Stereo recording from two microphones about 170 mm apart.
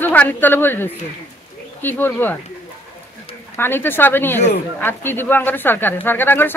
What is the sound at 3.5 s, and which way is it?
Speech, 15° left (ahead or behind).